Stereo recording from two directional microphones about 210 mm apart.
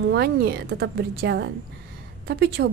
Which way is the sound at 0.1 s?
50° right (ahead or behind).